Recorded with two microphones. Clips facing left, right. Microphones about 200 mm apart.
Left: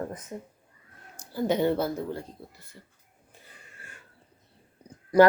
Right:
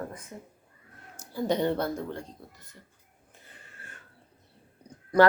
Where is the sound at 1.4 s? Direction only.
5° left (ahead or behind).